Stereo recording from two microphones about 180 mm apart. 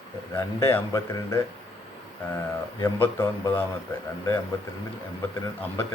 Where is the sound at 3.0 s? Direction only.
15° left (ahead or behind).